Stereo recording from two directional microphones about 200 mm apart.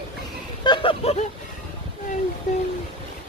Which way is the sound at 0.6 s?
25° left (ahead or behind).